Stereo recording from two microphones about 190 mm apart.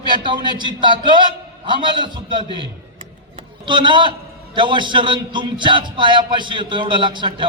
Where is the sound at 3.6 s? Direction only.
25° right (ahead or behind).